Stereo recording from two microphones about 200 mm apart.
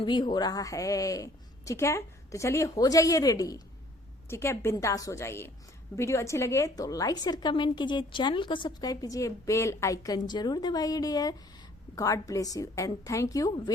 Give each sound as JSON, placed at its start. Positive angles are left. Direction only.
{"t": 0.0, "sound": "a woman's voice", "side_deg": 20}